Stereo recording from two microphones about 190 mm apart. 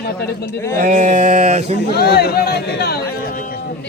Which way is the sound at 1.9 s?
55° left (ahead or behind).